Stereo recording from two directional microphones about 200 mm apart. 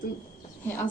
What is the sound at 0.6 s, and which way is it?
Speech, 10° left (ahead or behind).